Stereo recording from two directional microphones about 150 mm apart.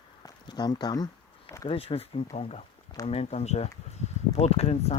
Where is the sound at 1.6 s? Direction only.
40° left (ahead or behind).